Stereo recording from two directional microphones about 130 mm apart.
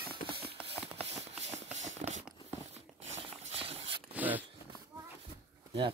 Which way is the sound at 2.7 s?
50° right (ahead or behind).